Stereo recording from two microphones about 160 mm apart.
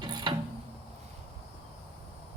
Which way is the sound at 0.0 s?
25° right (ahead or behind).